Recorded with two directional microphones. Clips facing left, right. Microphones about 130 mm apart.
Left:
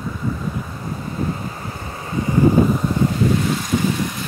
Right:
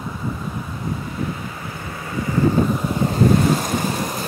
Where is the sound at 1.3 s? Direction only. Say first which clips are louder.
Left 2 dB; 35° left (ahead or behind).